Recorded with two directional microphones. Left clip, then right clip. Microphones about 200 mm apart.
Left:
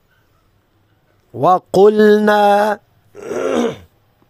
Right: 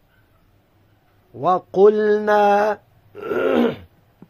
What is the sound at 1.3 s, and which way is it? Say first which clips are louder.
Mantra: left 6 dB; 50° left (ahead or behind).